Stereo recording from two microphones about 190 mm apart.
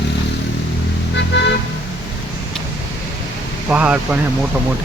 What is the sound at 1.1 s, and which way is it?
Vehicle, 65° left (ahead or behind).